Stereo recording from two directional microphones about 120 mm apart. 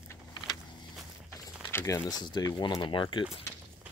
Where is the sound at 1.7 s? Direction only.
25° left (ahead or behind); by 3.3 s 45° left (ahead or behind).